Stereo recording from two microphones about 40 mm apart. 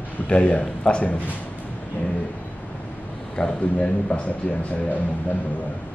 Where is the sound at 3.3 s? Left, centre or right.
Left.